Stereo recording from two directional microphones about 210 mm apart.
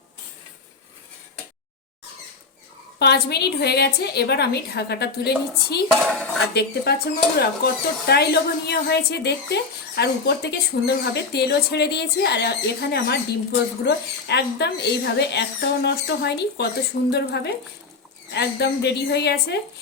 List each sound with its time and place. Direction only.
3.0 s speech: 50° left (ahead or behind)
5.9 s speech: 5° left (ahead or behind)
6.5 s speech: 50° left (ahead or behind)